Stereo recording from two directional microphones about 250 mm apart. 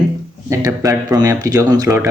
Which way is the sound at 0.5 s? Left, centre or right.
Centre.